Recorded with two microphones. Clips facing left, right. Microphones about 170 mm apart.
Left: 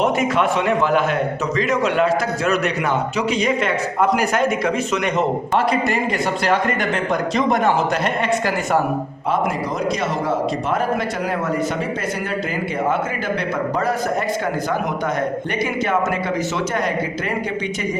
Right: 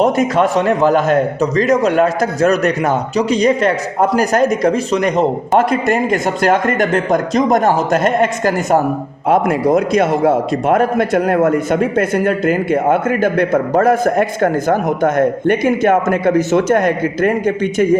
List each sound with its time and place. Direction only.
0.0 s a man's voice: 40° right (ahead or behind)
9.3 s a man's voice: 55° right (ahead or behind)